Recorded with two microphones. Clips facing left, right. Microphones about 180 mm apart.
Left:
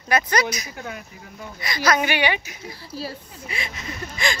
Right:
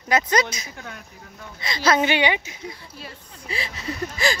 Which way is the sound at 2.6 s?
30° left (ahead or behind).